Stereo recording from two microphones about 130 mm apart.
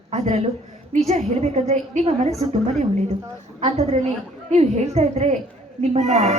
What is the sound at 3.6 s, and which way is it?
A woman's voice, 60° right (ahead or behind).